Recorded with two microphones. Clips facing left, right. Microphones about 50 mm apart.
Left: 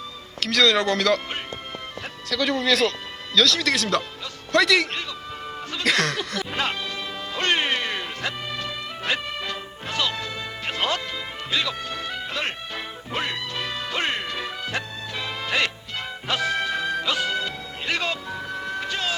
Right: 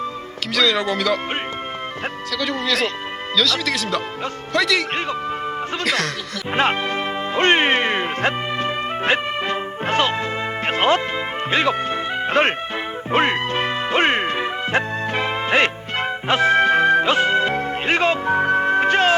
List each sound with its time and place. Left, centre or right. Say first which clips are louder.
0.5 s speech: even; centre
2.3 s speech: left 1 dB; centre
6.5 s music: right 13 dB; right
12.3 s speech: right 12 dB; right
13.1 s music: right 11 dB; right